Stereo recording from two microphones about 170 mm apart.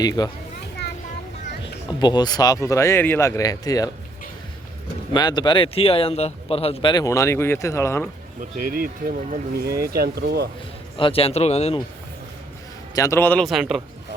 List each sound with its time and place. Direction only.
0.0 s speech: 20° left (ahead or behind)
1.9 s speech: 25° left (ahead or behind)
5.1 s speech: 25° left (ahead or behind)
6.9 s speech: 20° left (ahead or behind)
8.4 s speech: 60° right (ahead or behind)
10.9 s speech: 30° left (ahead or behind)
12.9 s speech: 20° left (ahead or behind)
13.4 s a man's voice: centre (ahead or behind)